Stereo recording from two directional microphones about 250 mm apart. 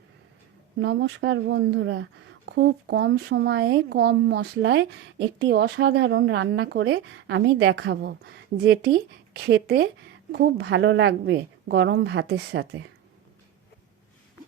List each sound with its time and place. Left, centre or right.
0.8 s speech: right